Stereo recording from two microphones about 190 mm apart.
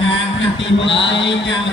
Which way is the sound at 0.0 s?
75° left (ahead or behind).